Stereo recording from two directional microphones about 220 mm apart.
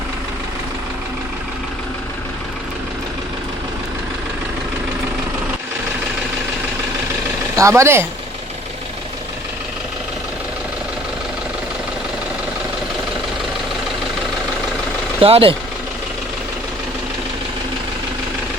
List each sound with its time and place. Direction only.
7.5 s speech: 15° right (ahead or behind)
15.2 s speech: 25° right (ahead or behind)